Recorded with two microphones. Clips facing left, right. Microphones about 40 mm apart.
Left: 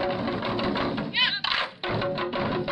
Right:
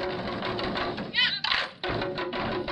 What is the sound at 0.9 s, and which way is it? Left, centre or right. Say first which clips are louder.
Thump: left 2 dB; centre.